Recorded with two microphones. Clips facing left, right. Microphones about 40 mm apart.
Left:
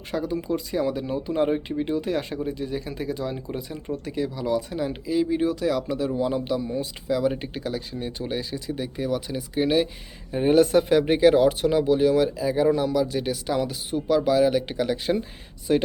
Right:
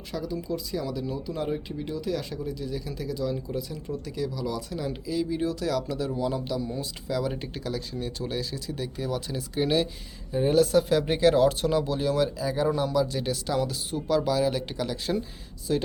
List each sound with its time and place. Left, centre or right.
0.1 s speech: left; by 9.8 s centre
10.3 s speech: left